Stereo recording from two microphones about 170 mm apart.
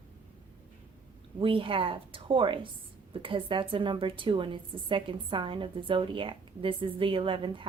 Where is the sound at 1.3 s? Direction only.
30° right (ahead or behind).